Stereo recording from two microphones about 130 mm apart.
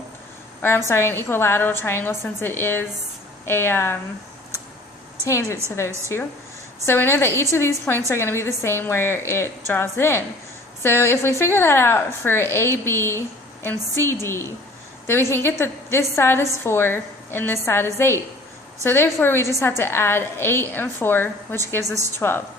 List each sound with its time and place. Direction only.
0.6 s a woman's voice: 20° left (ahead or behind)
5.2 s a woman's voice: 25° left (ahead or behind)